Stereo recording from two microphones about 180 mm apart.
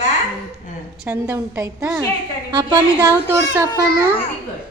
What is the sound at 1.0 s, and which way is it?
A woman's voice, 10° right (ahead or behind).